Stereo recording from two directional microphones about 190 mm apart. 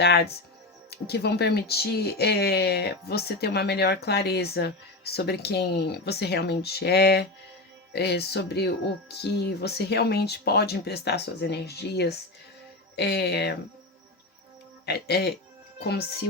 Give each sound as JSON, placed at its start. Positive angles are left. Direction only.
{"t": 0.9, "sound": "speech", "side_deg": 60}
{"t": 14.8, "sound": "speech", "side_deg": 60}